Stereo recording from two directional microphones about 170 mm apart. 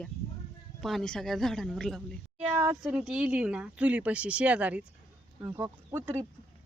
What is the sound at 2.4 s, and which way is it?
Speech, 15° right (ahead or behind).